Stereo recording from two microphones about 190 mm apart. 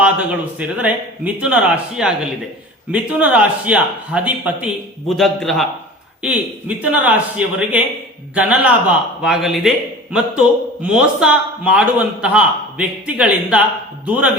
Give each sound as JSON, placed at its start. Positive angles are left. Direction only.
{"t": 0.0, "sound": "a man's voice", "side_deg": -5}